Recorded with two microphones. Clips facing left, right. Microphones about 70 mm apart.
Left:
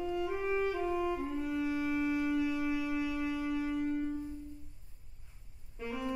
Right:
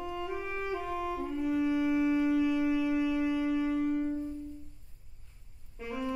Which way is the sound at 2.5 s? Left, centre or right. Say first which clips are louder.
Right 5 dB; centre.